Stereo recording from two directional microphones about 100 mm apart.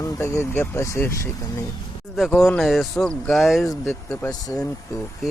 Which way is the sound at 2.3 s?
5° left (ahead or behind).